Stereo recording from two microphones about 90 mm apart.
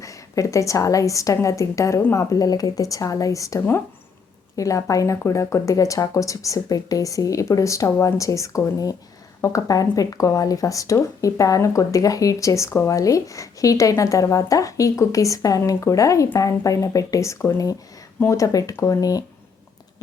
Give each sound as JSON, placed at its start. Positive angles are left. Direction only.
{"t": 0.0, "sound": "speech", "side_deg": 35}